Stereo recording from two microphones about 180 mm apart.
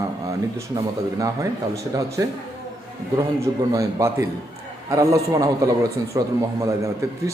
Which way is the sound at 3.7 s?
15° right (ahead or behind).